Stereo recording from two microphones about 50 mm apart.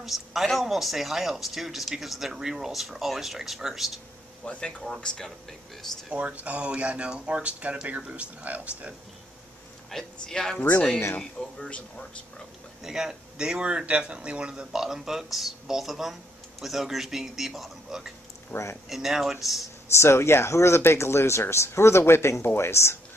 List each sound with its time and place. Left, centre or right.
0.0 s speech: centre
4.5 s a man's voice: left
6.1 s speech: right
9.8 s a man's voice: centre
12.8 s speech: centre
14.5 s speech: centre
18.5 s speech: left
18.9 s speech: centre
19.6 s speech: left